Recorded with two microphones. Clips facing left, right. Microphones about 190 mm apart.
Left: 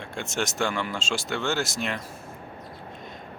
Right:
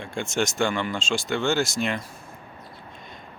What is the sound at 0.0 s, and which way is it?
Speech, centre (ahead or behind).